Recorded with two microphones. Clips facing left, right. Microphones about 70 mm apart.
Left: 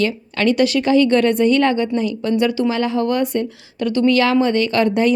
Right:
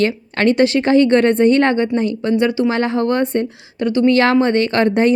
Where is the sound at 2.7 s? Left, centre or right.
Right.